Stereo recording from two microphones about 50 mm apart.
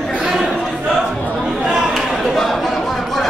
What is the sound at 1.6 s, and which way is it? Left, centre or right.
Chatter, centre.